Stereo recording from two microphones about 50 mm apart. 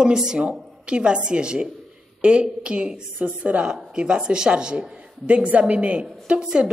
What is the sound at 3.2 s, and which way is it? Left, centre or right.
Speech, right.